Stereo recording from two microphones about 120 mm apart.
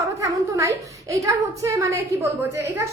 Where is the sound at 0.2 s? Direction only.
25° right (ahead or behind).